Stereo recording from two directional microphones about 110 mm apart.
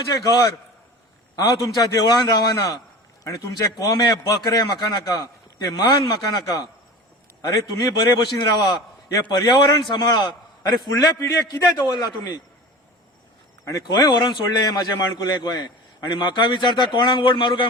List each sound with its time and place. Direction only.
0.1 s a man's voice: 40° left (ahead or behind)
1.4 s a man's voice: 35° left (ahead or behind)
3.8 s a man's voice: 35° left (ahead or behind)
7.4 s a man's voice: 40° left (ahead or behind)
13.7 s a man's voice: 35° left (ahead or behind)